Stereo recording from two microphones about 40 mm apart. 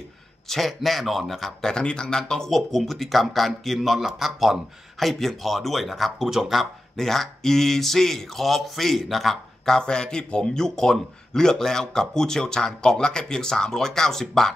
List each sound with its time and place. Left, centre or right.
0.5 s a man's voice: centre
1.6 s speech: centre
2.5 s a man's voice: centre
7.0 s speech: centre
9.8 s speech: centre